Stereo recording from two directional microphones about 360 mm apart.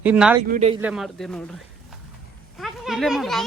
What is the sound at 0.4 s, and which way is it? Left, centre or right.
Speech, centre.